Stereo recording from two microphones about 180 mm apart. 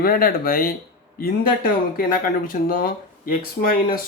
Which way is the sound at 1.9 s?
50° left (ahead or behind).